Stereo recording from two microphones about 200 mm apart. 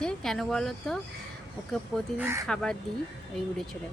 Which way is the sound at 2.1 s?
10° right (ahead or behind).